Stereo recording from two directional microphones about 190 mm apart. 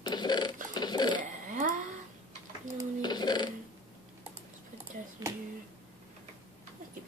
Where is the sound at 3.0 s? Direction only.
20° left (ahead or behind).